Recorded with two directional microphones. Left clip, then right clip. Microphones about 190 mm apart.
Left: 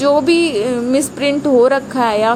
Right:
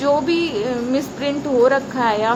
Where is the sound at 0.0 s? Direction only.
30° left (ahead or behind).